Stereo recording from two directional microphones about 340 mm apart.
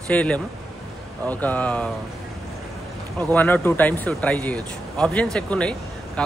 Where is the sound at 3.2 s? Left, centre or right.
Centre.